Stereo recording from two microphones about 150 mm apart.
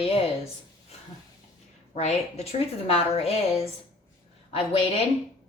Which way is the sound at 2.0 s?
45° left (ahead or behind).